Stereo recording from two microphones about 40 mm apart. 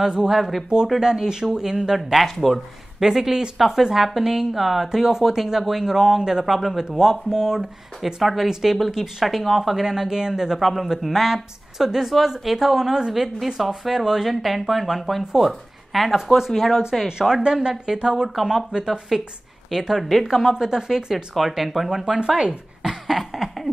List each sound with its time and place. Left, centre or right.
0.0 s speech: right
0.3 s a woman's voice: centre
2.0 s speech: centre
3.0 s a woman's voice: centre
6.4 s a woman's voice: centre
9.2 s a woman's voice: centre
10.6 s a woman's voice: centre
13.1 s speech: centre
17.4 s a woman's voice: right
21.4 s speech: centre
22.4 s speech: centre